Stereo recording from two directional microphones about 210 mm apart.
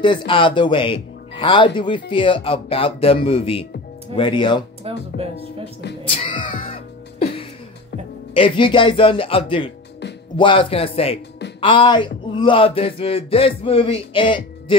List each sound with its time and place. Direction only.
0.0 s speech: 20° left (ahead or behind)
4.8 s speech: 25° right (ahead or behind)
6.0 s speech: 25° left (ahead or behind)
6.6 s music: 25° left (ahead or behind)
8.4 s speech: 25° left (ahead or behind)